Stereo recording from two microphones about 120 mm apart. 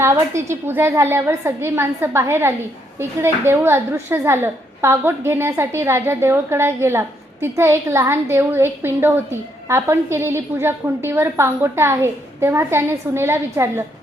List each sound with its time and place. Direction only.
0.0 s a woman's voice: 25° right (ahead or behind)